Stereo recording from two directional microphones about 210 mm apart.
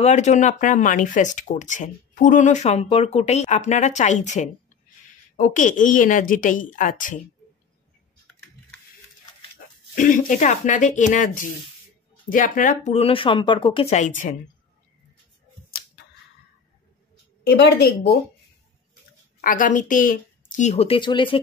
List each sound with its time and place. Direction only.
0.0 s speech: 35° left (ahead or behind)
9.9 s speech: 40° left (ahead or behind)
17.5 s a woman's voice: 50° left (ahead or behind)
19.4 s speech: 40° left (ahead or behind); by 21.4 s 20° left (ahead or behind)